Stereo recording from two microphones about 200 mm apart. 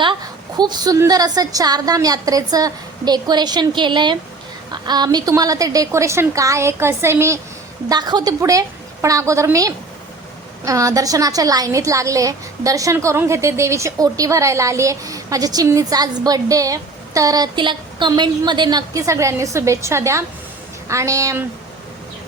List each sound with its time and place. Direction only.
0.0 s a woman's voice: 20° right (ahead or behind)